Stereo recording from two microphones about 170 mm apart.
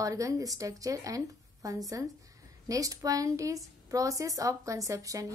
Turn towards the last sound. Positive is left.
turn(degrees=-20)  # may be behind; listen again after turning